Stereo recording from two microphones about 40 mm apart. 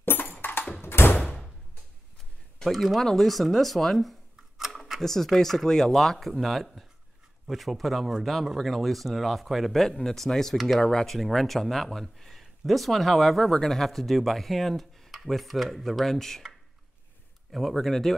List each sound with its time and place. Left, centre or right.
0.0 s a sound: left
0.8 s door: left
2.7 s speech: centre
4.6 s a sound: centre
5.0 s speech: centre
11.1 s speech: centre
17.5 s speech: centre